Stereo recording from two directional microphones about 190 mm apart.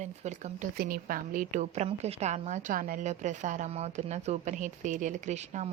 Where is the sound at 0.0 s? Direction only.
40° right (ahead or behind).